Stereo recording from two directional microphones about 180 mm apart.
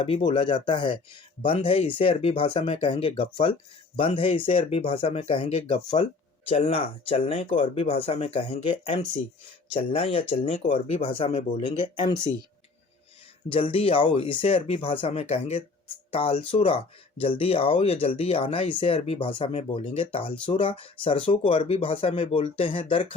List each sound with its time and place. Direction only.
0.0 s speech: 30° left (ahead or behind)
13.5 s speech: 30° left (ahead or behind)